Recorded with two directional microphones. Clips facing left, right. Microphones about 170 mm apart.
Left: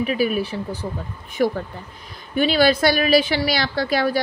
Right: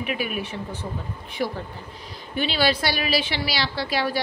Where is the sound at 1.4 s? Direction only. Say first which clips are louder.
Left 7 dB; 50° left (ahead or behind).